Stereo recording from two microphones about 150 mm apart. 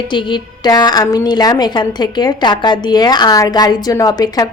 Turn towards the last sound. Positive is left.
turn(degrees=25)  # may be behind; listen again after turning